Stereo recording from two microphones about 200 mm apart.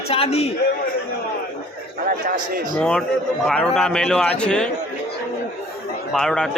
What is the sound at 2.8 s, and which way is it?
A man's voice, 5° left (ahead or behind).